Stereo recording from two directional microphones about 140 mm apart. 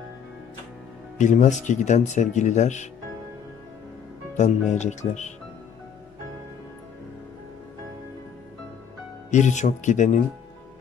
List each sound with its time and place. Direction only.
1.1 s speech: 60° left (ahead or behind)
4.4 s speech: 55° left (ahead or behind)
9.3 s speech: 60° left (ahead or behind)